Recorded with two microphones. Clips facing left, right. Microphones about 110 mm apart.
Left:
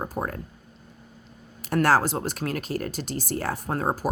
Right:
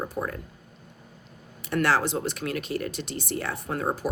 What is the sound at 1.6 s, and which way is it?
A woman's voice, 40° left (ahead or behind).